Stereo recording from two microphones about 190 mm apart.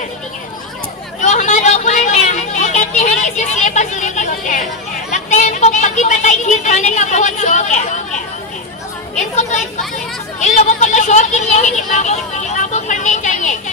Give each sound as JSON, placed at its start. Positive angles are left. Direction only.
{"t": 1.2, "sound": "a sound", "side_deg": 40}
{"t": 5.1, "sound": "speech", "side_deg": 40}
{"t": 9.4, "sound": "speech", "side_deg": 40}